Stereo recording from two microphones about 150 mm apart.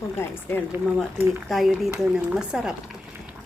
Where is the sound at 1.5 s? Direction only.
Centre (ahead or behind).